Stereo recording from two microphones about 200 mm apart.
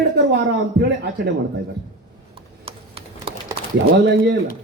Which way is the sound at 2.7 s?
30° right (ahead or behind).